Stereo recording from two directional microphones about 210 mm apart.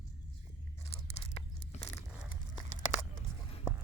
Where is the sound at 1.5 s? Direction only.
30° left (ahead or behind).